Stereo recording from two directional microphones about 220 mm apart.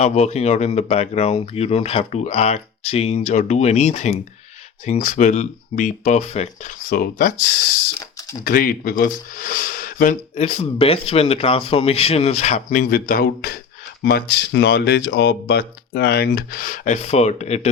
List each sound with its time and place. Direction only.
0.0 s speech: 30° left (ahead or behind)
8.4 s speech: 40° left (ahead or behind)